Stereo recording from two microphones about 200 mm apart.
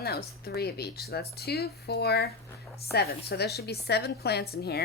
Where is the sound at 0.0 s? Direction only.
50° left (ahead or behind).